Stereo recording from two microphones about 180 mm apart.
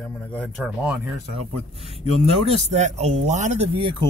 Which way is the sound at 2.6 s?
40° right (ahead or behind).